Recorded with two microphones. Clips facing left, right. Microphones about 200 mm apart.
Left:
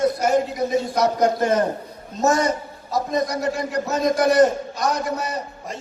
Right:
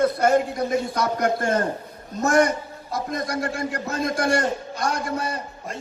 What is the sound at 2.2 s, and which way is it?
A man's voice, 55° right (ahead or behind).